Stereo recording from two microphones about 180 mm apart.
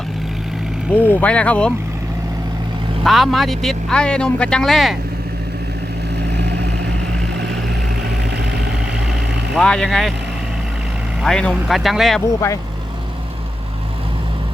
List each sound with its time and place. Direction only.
0.9 s speech: 10° left (ahead or behind)
3.0 s speech: centre (ahead or behind)
6.3 s vehicle: 70° right (ahead or behind)
9.6 s speech: 5° left (ahead or behind)
11.2 s speech: 5° left (ahead or behind)